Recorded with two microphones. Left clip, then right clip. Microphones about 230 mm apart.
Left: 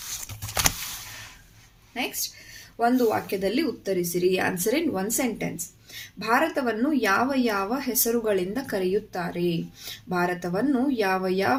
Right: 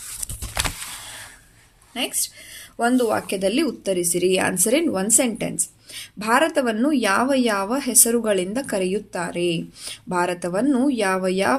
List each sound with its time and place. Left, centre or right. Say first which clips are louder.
2.7 s a woman's voice: right 2 dB; right